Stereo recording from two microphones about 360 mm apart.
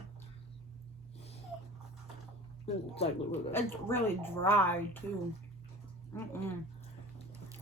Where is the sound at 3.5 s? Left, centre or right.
Centre.